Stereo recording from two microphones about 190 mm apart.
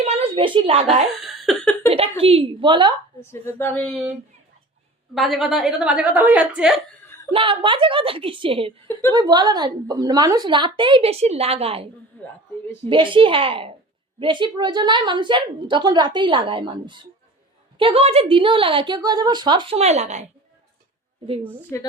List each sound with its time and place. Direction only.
0.0 s a woman's voice: 30° right (ahead or behind)
1.2 s a sound: centre (ahead or behind)
1.9 s a woman's voice: 30° right (ahead or behind)
3.3 s speech: 10° left (ahead or behind)
5.1 s a woman's voice: centre (ahead or behind)
7.3 s a woman's voice: 25° right (ahead or behind)
12.1 s a woman's voice: 10° left (ahead or behind)
12.9 s a woman's voice: 25° right (ahead or behind)
21.7 s speech: 15° left (ahead or behind)